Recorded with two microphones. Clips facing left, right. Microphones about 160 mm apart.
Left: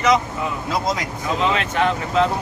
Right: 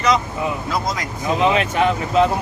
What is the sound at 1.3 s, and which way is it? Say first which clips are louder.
Speech: right 3 dB; 15° right (ahead or behind).